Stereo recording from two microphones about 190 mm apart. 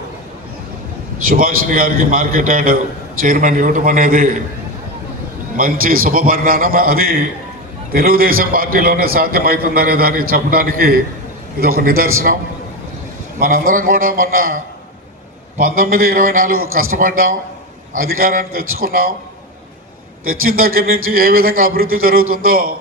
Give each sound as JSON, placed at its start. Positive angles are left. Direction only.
{"t": 1.3, "sound": "a man's voice", "side_deg": -45}
{"t": 5.5, "sound": "a man's voice", "side_deg": -50}
{"t": 13.4, "sound": "a man's voice", "side_deg": -50}
{"t": 20.2, "sound": "a man's voice", "side_deg": -50}